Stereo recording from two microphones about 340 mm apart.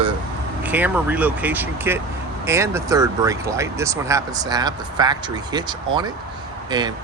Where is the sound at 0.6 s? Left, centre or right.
Centre.